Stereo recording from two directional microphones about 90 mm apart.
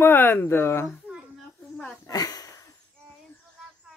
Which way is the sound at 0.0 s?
20° left (ahead or behind).